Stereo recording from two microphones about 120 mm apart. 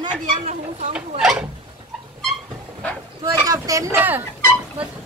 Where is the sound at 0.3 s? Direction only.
85° right.